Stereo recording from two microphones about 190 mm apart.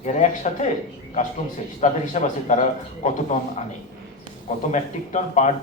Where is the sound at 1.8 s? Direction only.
40° left (ahead or behind).